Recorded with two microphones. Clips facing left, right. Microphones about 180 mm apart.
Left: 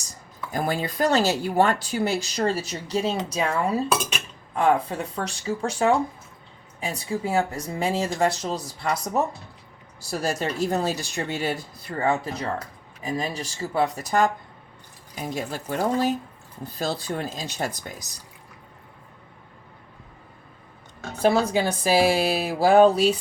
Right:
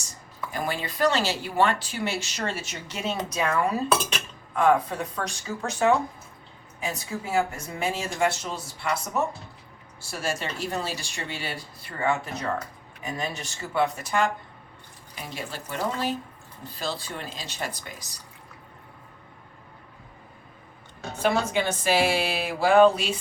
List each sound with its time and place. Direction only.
0.5 s speech: 40° left (ahead or behind)
21.2 s speech: 35° left (ahead or behind)